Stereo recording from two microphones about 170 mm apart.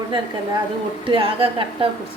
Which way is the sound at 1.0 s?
30° right (ahead or behind).